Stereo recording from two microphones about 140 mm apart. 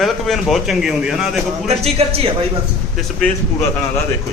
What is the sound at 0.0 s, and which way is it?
Speech, centre (ahead or behind).